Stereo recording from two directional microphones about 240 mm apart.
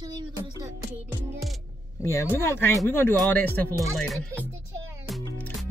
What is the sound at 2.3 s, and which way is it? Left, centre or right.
Speech, centre.